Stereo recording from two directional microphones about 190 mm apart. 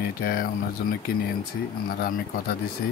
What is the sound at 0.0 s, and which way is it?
Speech, 50° left (ahead or behind).